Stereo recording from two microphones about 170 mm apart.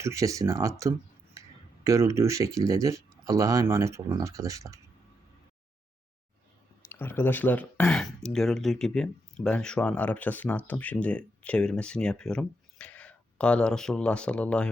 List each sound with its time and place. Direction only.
0.0 s speech: 15° right (ahead or behind)
6.8 s speech: 15° left (ahead or behind)